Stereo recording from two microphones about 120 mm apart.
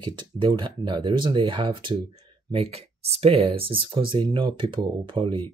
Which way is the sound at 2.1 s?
55° right (ahead or behind).